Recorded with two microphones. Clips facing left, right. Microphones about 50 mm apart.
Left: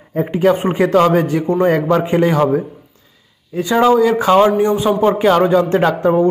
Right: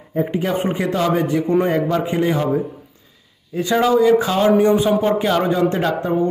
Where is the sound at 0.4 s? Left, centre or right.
Left.